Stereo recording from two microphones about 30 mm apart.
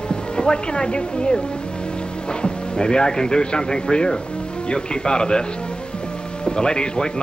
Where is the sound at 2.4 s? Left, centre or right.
Left.